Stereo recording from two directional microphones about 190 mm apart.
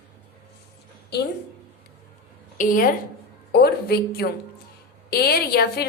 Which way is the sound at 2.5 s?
45° left (ahead or behind).